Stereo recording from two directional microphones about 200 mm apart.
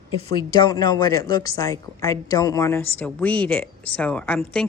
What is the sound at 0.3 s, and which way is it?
A woman's voice, 20° left (ahead or behind).